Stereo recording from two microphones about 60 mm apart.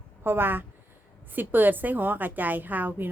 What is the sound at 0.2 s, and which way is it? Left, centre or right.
A woman's voice, right.